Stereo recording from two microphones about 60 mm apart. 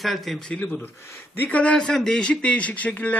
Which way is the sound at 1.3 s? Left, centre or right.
Left.